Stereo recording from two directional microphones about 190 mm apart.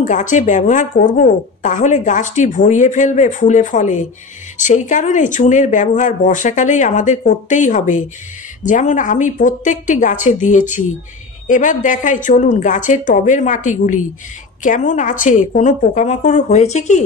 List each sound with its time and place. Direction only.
0.0 s a woman's voice: 40° left (ahead or behind)